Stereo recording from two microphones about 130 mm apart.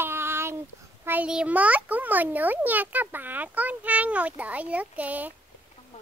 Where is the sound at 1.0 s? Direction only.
10° right (ahead or behind).